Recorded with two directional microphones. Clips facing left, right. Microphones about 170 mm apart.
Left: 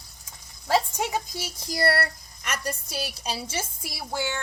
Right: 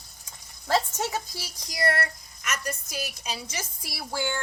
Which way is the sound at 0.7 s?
15° left (ahead or behind).